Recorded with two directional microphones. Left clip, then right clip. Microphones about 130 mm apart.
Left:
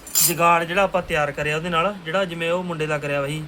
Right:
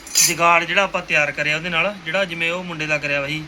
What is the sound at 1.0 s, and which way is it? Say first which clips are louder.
Speech: right 4 dB; 90° left.